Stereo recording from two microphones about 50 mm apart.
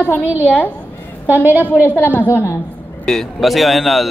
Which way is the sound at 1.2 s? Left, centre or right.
Right.